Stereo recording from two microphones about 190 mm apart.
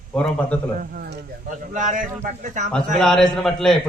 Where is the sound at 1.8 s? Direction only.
40° right (ahead or behind).